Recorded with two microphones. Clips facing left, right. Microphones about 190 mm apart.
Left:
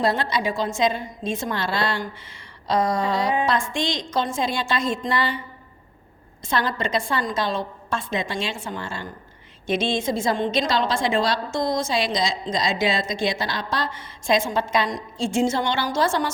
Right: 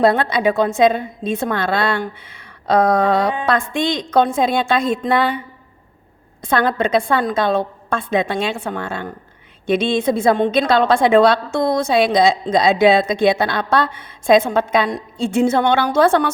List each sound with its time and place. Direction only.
0.0 s a woman's voice: 55° right (ahead or behind)
6.4 s a woman's voice: 55° right (ahead or behind)